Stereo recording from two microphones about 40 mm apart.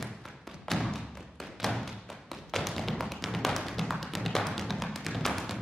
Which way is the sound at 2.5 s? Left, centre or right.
Centre.